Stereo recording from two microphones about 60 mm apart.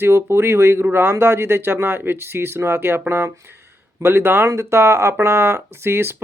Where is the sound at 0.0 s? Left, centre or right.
Right.